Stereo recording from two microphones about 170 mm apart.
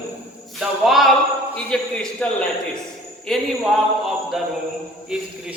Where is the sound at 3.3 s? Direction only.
Centre (ahead or behind).